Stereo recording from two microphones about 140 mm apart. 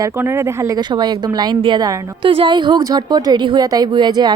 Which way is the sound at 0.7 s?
30° right (ahead or behind).